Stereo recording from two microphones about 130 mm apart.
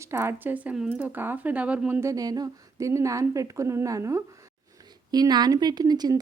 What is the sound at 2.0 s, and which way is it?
A woman's voice, 25° right (ahead or behind).